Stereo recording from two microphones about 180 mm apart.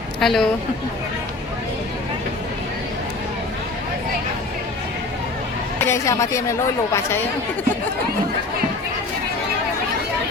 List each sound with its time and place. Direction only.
0.2 s speech: centre (ahead or behind)
5.8 s a woman's voice: 15° left (ahead or behind)